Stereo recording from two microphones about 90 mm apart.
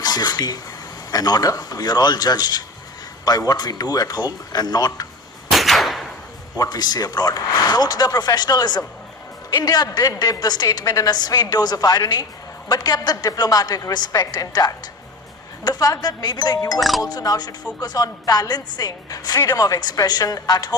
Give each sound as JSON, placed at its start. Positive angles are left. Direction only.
{"t": 0.0, "sound": "a woman's voice", "side_deg": 50}
{"t": 5.5, "sound": "a sound", "side_deg": 0}
{"t": 6.6, "sound": "a woman's voice", "side_deg": 50}